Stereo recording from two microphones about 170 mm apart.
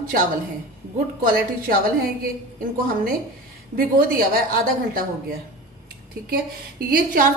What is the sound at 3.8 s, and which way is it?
A woman's voice, 55° right (ahead or behind).